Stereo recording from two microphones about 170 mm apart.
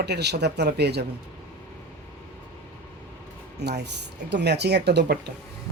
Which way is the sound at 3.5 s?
75° right (ahead or behind).